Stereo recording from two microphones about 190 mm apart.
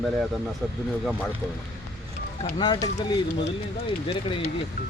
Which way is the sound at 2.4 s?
25° left (ahead or behind).